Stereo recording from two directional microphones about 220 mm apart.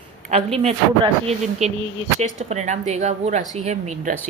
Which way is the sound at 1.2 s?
30° right (ahead or behind).